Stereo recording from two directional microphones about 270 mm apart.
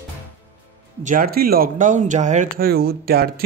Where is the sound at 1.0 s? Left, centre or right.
Right.